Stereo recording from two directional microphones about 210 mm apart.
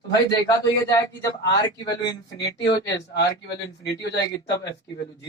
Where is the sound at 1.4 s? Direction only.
20° left (ahead or behind).